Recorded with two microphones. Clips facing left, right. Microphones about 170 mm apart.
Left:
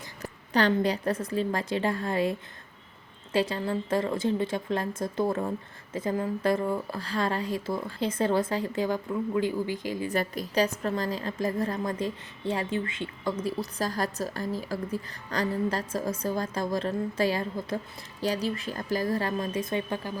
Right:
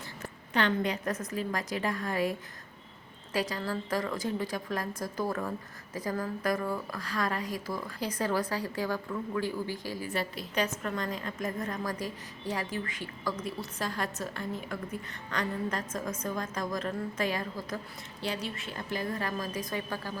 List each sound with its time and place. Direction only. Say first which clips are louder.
0.2 s speech: left 4 dB; 35° left (ahead or behind)
3.3 s speech: left 5 dB; 25° left (ahead or behind)
10.1 s a woman's voice: left 5 dB; 45° left (ahead or behind); by 20.1 s 25° left (ahead or behind)